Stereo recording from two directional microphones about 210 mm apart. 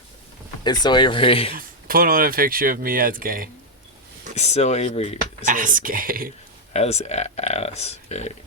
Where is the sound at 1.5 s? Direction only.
45° right (ahead or behind).